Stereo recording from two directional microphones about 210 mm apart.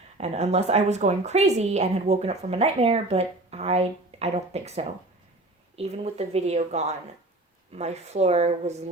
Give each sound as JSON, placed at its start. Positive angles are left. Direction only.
{"t": 0.2, "sound": "a woman's voice", "side_deg": -30}